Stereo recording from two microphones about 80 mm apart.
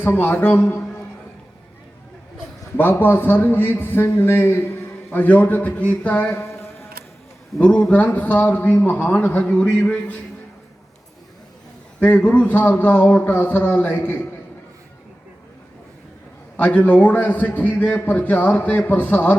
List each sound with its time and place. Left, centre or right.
0.0 s a man's voice: left
2.7 s a man's voice: left
7.6 s a man's voice: centre
11.9 s a man's voice: left
16.6 s a man's voice: left